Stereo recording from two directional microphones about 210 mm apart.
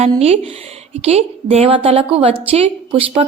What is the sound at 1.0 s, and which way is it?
A woman's voice, 30° right (ahead or behind).